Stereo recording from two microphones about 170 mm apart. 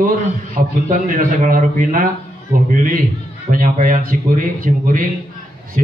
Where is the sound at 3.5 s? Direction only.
50° right (ahead or behind).